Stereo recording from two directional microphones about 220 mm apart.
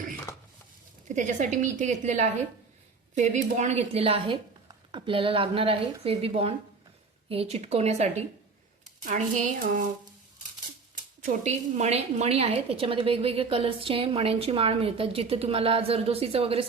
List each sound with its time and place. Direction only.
0.3 s a sound: 10° left (ahead or behind)
1.0 s a woman's voice: 35° right (ahead or behind)
11.2 s a woman's voice: 35° right (ahead or behind)